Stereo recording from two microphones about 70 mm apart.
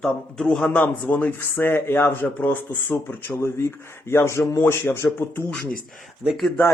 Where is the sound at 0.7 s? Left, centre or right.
Left.